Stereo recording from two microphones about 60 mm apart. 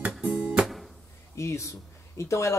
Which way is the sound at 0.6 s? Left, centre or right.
Centre.